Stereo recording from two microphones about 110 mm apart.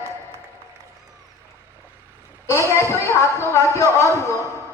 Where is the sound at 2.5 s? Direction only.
25° left (ahead or behind).